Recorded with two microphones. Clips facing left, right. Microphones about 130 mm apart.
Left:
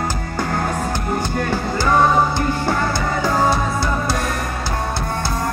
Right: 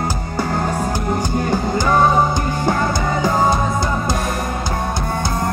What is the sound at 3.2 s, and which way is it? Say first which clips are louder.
Music: right 1 dB; 20° right (ahead or behind).